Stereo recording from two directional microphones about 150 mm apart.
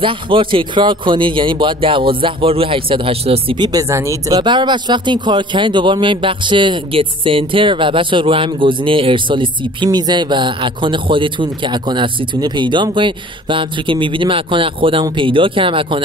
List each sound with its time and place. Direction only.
0.0 s speech: 35° right (ahead or behind)